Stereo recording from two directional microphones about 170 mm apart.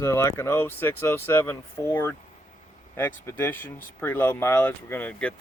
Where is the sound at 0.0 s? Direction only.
15° left (ahead or behind).